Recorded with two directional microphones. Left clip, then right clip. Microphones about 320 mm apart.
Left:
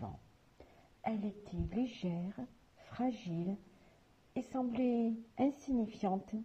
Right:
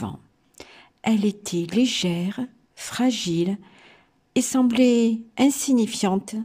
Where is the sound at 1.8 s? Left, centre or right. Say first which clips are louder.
Right 17 dB; right.